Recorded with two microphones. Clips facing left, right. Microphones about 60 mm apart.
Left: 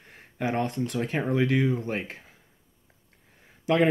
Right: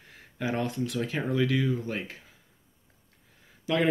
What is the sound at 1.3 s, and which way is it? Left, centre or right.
Speech, left.